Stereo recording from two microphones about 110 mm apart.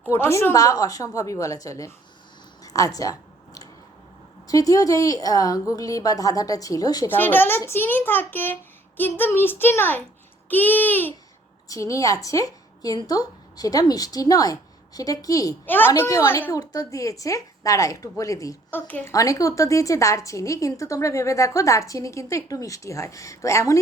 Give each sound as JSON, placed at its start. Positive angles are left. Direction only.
{"t": 0.0, "sound": "a woman's voice", "side_deg": 25}
{"t": 2.6, "sound": "a sound", "side_deg": 35}
{"t": 4.4, "sound": "a woman's voice", "side_deg": 35}
{"t": 7.1, "sound": "a child's voice", "side_deg": 15}
{"t": 11.7, "sound": "a woman's voice", "side_deg": 30}
{"t": 15.6, "sound": "a child's voice", "side_deg": 15}
{"t": 15.9, "sound": "a woman's voice", "side_deg": 30}
{"t": 16.6, "sound": "a woman's voice", "side_deg": 35}
{"t": 18.7, "sound": "a child's voice", "side_deg": 15}
{"t": 19.0, "sound": "a woman's voice", "side_deg": 30}